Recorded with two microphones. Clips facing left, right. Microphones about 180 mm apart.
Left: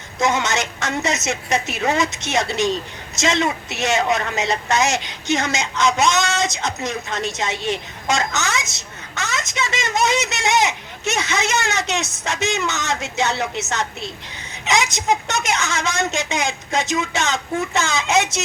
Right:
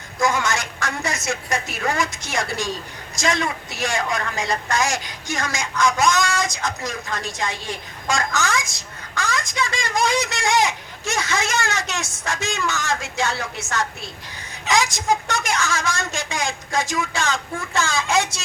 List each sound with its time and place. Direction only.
0.2 s a woman's voice: 20° left (ahead or behind)